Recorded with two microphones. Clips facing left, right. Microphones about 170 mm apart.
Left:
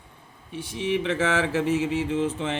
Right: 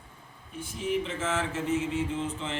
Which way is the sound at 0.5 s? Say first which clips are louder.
Left 4 dB; 75° left (ahead or behind).